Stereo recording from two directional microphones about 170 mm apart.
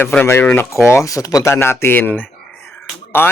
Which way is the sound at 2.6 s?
10° left (ahead or behind).